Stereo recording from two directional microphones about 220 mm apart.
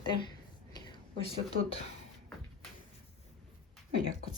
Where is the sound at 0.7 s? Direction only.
20° left (ahead or behind).